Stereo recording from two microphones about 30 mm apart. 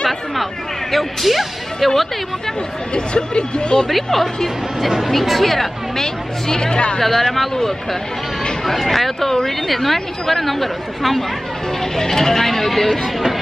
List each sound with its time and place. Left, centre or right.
0.9 s speech: centre
2.9 s speech: left
3.9 s speech: centre
4.8 s speech: centre
6.5 s speech: left
7.0 s speech: centre
12.0 s speech: centre
13.0 s speech: centre